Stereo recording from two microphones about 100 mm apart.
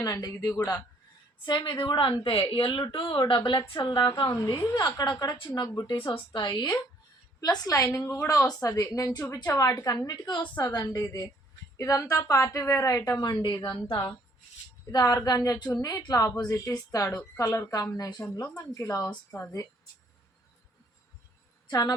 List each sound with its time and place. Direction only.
0.0 s a woman's voice: 40° left (ahead or behind)
1.5 s speech: 50° left (ahead or behind)
2.9 s speech: 45° left (ahead or behind)
4.3 s a woman's voice: 35° left (ahead or behind)
10.4 s a woman's voice: 20° left (ahead or behind)
10.8 s a woman's voice: 35° left (ahead or behind)
13.8 s a woman's voice: 25° left (ahead or behind)
14.9 s a woman's voice: 40° left (ahead or behind)
21.7 s a woman's voice: 40° left (ahead or behind)